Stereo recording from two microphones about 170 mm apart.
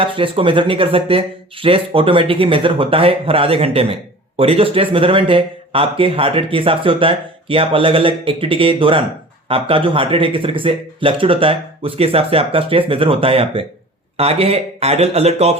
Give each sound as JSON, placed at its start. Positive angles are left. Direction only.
{"t": 0.0, "sound": "speech", "side_deg": -30}